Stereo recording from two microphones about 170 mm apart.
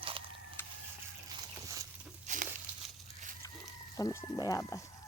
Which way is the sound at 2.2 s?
45° right (ahead or behind).